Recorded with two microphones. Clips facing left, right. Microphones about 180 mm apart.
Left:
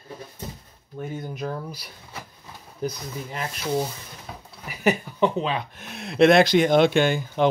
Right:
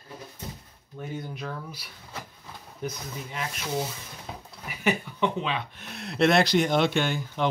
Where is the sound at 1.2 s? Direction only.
40° left (ahead or behind).